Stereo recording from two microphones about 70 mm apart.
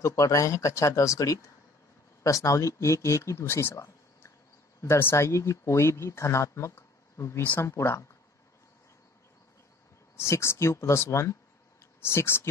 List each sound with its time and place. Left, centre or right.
0.0 s speech: left
10.1 s speech: left